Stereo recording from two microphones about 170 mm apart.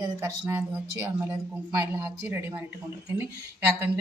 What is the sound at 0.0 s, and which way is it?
Speech, 15° right (ahead or behind).